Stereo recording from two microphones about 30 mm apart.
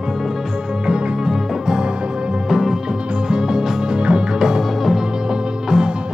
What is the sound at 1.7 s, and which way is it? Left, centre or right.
Music, right.